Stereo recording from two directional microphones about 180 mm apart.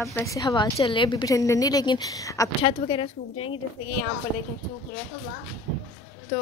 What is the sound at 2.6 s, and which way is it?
Speech, 30° left (ahead or behind).